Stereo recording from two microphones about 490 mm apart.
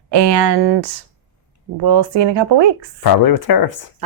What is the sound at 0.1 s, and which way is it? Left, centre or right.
A woman's voice, right.